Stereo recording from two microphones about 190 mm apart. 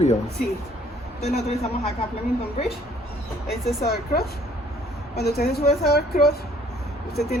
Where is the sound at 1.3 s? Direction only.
35° left (ahead or behind).